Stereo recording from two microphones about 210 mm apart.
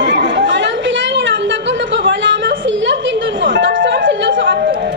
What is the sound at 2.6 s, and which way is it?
Speech, 60° right (ahead or behind).